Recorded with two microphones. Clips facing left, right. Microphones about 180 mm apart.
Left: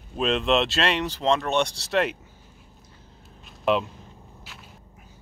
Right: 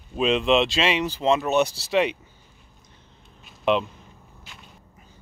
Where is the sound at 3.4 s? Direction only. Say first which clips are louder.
Right 1 dB; centre (ahead or behind).